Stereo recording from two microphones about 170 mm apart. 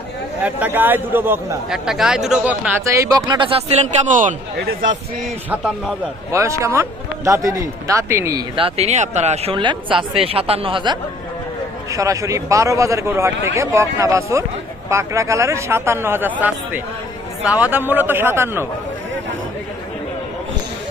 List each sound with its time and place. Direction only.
0.4 s a man's voice: 10° right (ahead or behind)
2.8 s speech: 20° right (ahead or behind)
3.7 s a man's voice: 50° right (ahead or behind)
4.5 s speech: 70° right (ahead or behind)
5.5 s a man's voice: 5° right (ahead or behind)
6.3 s a man's voice: 15° right (ahead or behind)
8.5 s speech: 35° right (ahead or behind)
11.9 s a man's voice: 20° right (ahead or behind)
17.4 s a man's voice: 10° right (ahead or behind)